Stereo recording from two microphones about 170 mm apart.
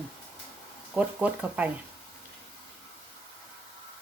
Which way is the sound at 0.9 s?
5° right (ahead or behind).